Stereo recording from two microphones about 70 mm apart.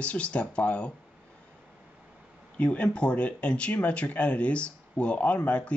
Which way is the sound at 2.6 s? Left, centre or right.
Centre.